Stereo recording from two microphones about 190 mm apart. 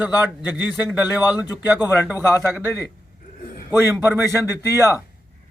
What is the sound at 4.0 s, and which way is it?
Speech, 10° right (ahead or behind).